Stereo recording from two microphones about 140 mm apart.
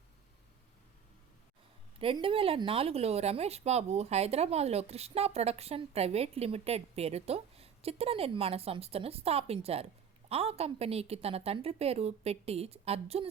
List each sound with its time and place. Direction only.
2.0 s speech: 40° right (ahead or behind)